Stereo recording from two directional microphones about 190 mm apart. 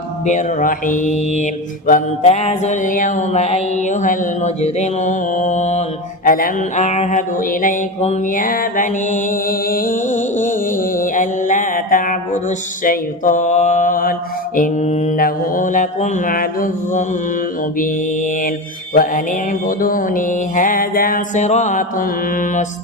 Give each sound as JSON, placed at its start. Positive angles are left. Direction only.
{"t": 0.3, "sound": "mantra", "side_deg": 40}
{"t": 6.2, "sound": "mantra", "side_deg": 50}
{"t": 17.7, "sound": "music", "side_deg": 45}